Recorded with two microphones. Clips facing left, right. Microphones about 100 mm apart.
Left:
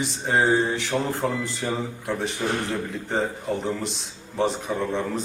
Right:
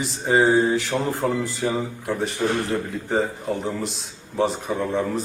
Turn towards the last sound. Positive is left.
turn(degrees=-5)  # may be behind; listen again after turning